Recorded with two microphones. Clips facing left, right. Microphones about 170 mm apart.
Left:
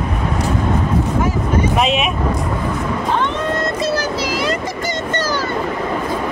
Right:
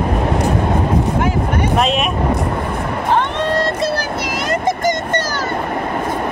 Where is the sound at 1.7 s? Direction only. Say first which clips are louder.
Right 3 dB; centre (ahead or behind).